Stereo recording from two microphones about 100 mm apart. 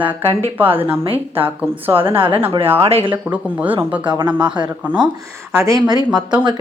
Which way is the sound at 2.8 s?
75° right (ahead or behind).